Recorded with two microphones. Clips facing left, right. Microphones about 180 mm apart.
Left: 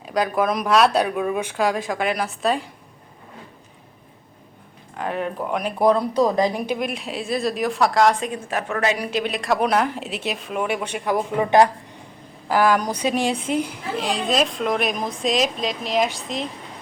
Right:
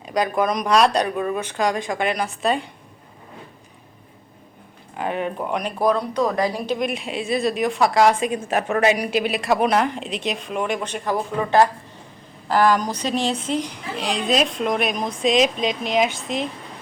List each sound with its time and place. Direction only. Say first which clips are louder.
0.0 s a woman's voice: even; centre (ahead or behind)
4.9 s a woman's voice: right 1 dB; centre (ahead or behind)
6.2 s a woman's voice: left 2 dB; 20° left (ahead or behind)
6.7 s a woman's voice: right 2 dB; centre (ahead or behind)
8.4 s a woman's voice: right 4 dB; 20° right (ahead or behind); by 16.5 s centre (ahead or behind)